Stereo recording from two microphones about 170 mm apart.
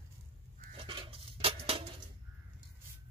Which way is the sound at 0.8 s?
30° right (ahead or behind).